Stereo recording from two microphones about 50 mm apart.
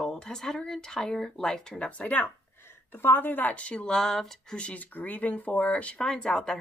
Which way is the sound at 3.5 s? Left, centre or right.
Left.